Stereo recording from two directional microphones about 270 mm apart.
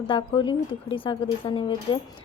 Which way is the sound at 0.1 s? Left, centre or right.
Centre.